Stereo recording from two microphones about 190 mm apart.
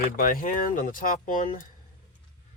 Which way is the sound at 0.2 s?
45° left (ahead or behind).